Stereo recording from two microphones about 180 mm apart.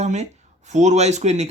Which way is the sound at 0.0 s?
40° right (ahead or behind).